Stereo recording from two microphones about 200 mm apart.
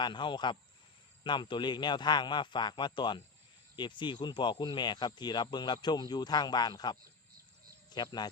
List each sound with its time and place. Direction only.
0.0 s speech: 25° left (ahead or behind)